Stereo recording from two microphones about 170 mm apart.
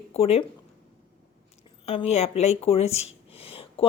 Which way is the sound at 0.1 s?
35° left (ahead or behind).